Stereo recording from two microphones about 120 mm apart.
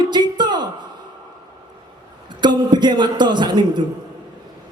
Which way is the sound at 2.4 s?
40° right (ahead or behind).